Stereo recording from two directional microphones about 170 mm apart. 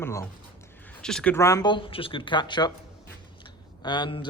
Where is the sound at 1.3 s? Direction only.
20° left (ahead or behind).